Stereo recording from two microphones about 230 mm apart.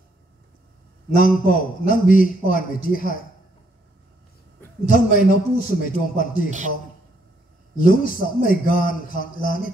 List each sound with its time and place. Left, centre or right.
1.1 s a man's voice: left
4.9 s a man's voice: left
7.8 s a man's voice: left